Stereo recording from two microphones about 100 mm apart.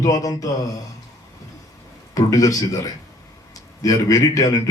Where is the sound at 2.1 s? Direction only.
35° left (ahead or behind).